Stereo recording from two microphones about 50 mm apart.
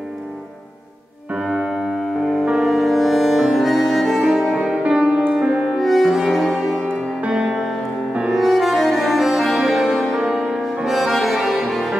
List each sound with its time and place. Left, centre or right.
1.3 s piano: centre
2.4 s music: centre
4.6 s music: centre
7.2 s music: centre